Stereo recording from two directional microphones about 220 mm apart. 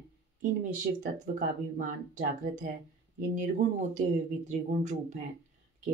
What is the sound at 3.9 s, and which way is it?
Speech, 30° right (ahead or behind).